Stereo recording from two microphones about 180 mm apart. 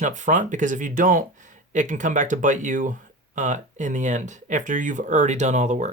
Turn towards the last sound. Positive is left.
turn(degrees=-40)  # may be behind; listen again after turning